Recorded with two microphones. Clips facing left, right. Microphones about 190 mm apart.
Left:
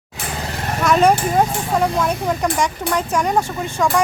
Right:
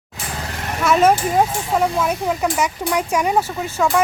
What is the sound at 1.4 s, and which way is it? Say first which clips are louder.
Speech: even; 5° right (ahead or behind).